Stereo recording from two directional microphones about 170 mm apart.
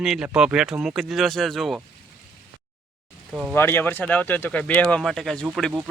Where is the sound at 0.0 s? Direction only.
5° right (ahead or behind).